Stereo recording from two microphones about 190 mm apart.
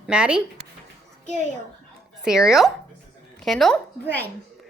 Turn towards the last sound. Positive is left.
turn(degrees=10)  # may be behind; listen again after turning